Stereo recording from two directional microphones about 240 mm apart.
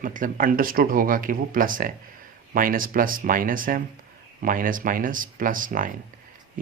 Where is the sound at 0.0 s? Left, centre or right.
Right.